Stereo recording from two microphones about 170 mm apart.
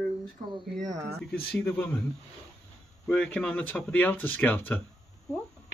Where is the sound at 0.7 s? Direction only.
Centre (ahead or behind).